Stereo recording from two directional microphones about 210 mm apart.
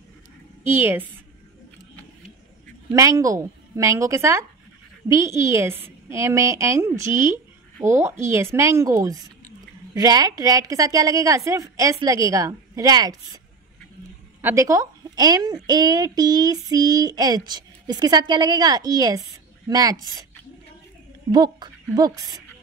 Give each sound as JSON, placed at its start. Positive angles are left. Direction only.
{"t": 0.7, "sound": "a woman's voice", "side_deg": -10}
{"t": 2.9, "sound": "a woman's voice", "side_deg": -15}
{"t": 14.4, "sound": "a woman's voice", "side_deg": -15}
{"t": 21.3, "sound": "a woman's voice", "side_deg": -20}